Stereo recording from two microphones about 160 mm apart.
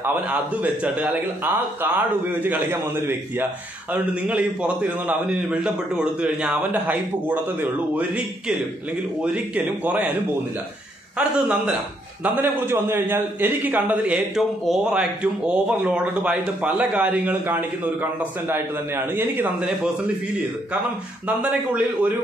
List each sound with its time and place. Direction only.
0.0 s a man's voice: 10° right (ahead or behind)
11.1 s a man's voice: 10° right (ahead or behind)
21.3 s a man's voice: 10° right (ahead or behind)